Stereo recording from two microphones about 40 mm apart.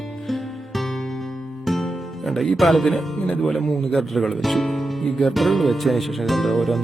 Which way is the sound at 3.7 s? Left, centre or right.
Centre.